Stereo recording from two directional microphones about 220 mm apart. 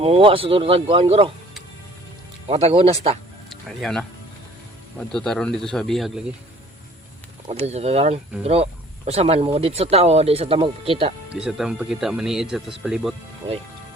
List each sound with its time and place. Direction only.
0.0 s speech: 25° right (ahead or behind)
2.5 s speech: 25° right (ahead or behind)
3.5 s speech: centre (ahead or behind)
7.4 s speech: 30° right (ahead or behind)
11.3 s speech: 5° right (ahead or behind)